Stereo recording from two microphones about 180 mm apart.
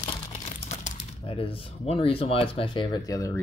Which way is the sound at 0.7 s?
35° left (ahead or behind).